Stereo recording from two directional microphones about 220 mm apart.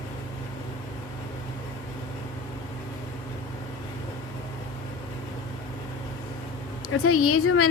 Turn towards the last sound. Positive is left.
turn(degrees=75)  # may be behind; listen again after turning